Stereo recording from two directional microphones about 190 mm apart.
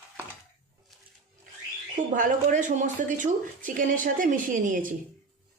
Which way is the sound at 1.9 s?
45° right (ahead or behind).